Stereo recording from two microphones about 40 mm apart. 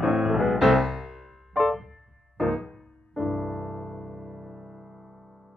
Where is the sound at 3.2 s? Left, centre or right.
Centre.